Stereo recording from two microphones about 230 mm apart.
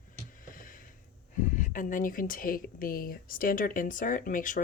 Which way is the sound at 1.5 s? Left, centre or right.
Left.